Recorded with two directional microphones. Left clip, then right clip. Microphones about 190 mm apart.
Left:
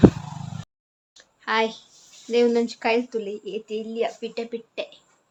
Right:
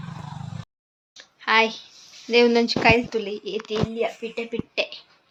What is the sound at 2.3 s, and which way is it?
Speech, 10° right (ahead or behind).